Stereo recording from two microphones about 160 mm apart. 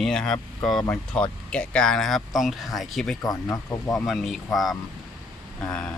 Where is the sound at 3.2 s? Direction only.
20° left (ahead or behind).